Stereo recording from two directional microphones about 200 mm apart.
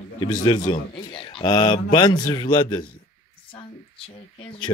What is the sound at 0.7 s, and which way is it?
Speech, 25° left (ahead or behind).